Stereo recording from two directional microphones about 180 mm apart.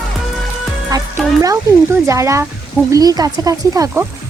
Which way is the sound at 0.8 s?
20° right (ahead or behind).